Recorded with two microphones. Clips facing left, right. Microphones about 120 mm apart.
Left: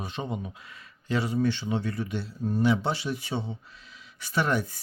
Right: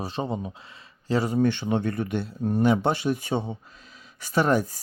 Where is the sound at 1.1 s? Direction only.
45° right (ahead or behind).